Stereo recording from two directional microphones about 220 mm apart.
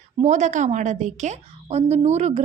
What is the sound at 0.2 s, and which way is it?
A woman's voice, 30° right (ahead or behind).